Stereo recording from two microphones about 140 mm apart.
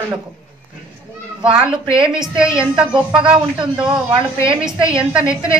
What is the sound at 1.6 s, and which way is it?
A woman's voice, 5° right (ahead or behind).